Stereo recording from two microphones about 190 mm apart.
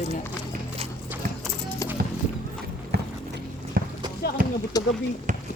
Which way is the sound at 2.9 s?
60° right (ahead or behind).